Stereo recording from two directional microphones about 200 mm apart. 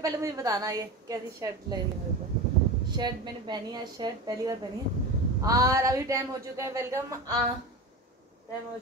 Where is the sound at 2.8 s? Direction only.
20° right (ahead or behind).